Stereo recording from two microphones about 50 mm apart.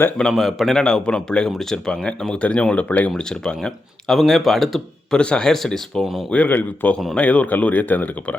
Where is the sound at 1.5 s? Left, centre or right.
Centre; by 3.1 s left.